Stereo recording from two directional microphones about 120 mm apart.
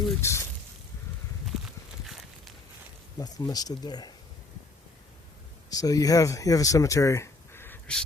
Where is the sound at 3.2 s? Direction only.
30° left (ahead or behind).